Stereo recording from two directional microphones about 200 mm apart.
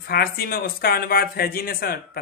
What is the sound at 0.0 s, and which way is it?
Speech, 50° left (ahead or behind).